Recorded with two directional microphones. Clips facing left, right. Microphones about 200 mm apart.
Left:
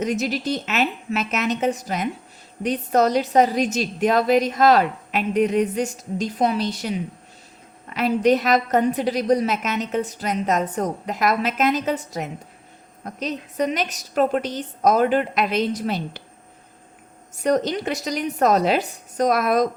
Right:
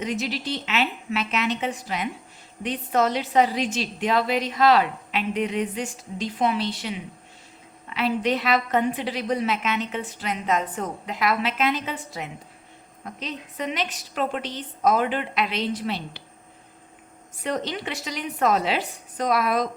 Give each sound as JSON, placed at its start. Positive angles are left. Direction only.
{"t": 0.0, "sound": "a woman's voice", "side_deg": 45}
{"t": 17.3, "sound": "a woman's voice", "side_deg": 45}